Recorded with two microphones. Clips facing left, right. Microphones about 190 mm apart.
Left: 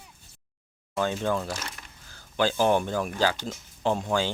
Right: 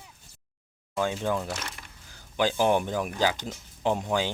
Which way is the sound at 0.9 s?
10° right (ahead or behind).